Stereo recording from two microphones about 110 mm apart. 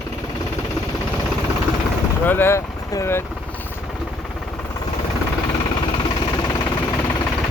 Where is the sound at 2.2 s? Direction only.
20° left (ahead or behind).